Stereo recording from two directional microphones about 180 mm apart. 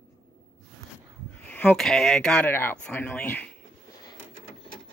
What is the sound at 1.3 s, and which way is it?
Speech, 10° left (ahead or behind).